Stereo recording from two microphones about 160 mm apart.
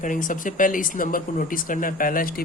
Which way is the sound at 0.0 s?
55° left (ahead or behind).